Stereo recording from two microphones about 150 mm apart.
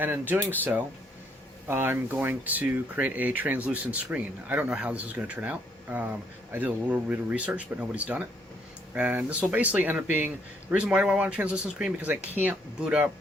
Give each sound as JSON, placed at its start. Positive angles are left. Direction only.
{"t": 0.0, "sound": "speech", "side_deg": -15}
{"t": 1.6, "sound": "speech", "side_deg": -15}